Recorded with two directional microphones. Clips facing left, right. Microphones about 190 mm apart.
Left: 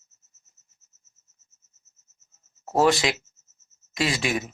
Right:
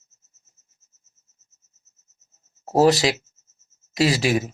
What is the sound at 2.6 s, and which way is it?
Speech, 35° right (ahead or behind).